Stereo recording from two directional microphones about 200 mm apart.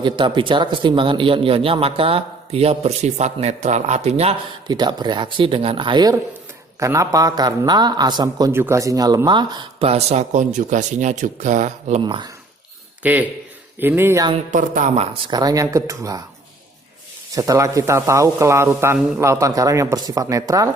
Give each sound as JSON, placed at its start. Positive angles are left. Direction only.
{"t": 0.0, "sound": "a man's voice", "side_deg": -25}
{"t": 4.7, "sound": "a man's voice", "side_deg": -20}
{"t": 12.0, "sound": "a man's voice", "side_deg": -25}
{"t": 13.0, "sound": "a man's voice", "side_deg": -10}
{"t": 14.5, "sound": "a woman's voice", "side_deg": -40}
{"t": 15.3, "sound": "speech", "side_deg": -20}
{"t": 17.3, "sound": "speech", "side_deg": -15}